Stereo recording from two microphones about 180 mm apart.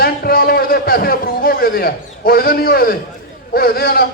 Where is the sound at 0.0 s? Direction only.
55° left (ahead or behind).